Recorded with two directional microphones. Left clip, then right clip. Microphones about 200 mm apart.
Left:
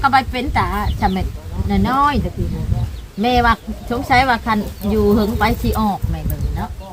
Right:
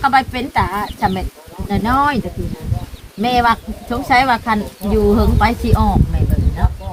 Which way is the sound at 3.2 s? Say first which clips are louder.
Right 1 dB; 10° left (ahead or behind).